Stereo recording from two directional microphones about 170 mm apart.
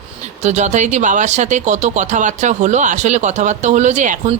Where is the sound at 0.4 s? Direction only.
45° right (ahead or behind).